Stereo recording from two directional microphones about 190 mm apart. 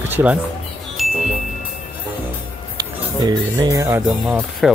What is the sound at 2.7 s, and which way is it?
Speech, 20° right (ahead or behind).